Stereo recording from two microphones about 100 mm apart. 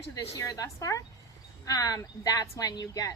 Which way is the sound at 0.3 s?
35° left (ahead or behind).